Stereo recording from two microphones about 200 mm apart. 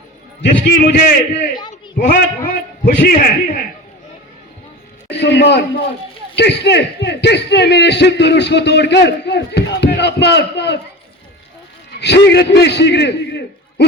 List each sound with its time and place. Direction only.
0.8 s a man's voice: 40° left (ahead or behind)
2.0 s a man's voice: 50° left (ahead or behind)
5.0 s speech: 60° left (ahead or behind)
11.9 s a man's voice: 60° left (ahead or behind)